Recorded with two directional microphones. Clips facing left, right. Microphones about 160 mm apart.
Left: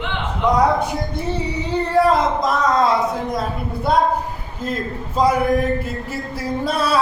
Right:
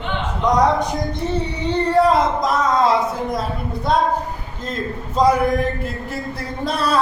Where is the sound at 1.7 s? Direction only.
Centre (ahead or behind).